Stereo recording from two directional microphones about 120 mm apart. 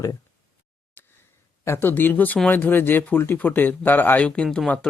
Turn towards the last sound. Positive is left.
turn(degrees=5)  # may be behind; listen again after turning